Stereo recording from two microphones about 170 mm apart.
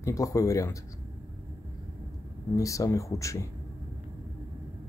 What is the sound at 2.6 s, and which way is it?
Speech, 20° left (ahead or behind).